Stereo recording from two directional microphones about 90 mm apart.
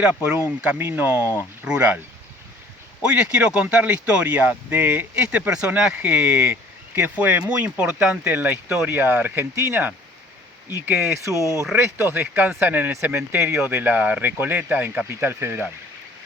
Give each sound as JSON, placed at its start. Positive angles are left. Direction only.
{"t": 0.0, "sound": "speech", "side_deg": -10}
{"t": 0.8, "sound": "speech", "side_deg": -25}
{"t": 3.1, "sound": "speech", "side_deg": -10}